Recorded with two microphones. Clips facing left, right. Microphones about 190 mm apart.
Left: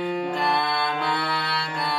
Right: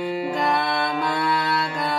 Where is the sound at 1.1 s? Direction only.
45° right (ahead or behind).